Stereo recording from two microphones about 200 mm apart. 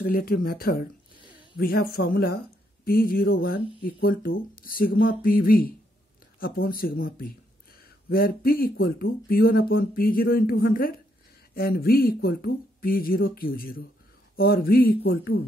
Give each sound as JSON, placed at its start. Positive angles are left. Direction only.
{"t": 0.0, "sound": "speech", "side_deg": 50}